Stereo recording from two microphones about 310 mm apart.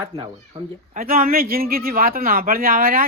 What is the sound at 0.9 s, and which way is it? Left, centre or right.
Speech, right.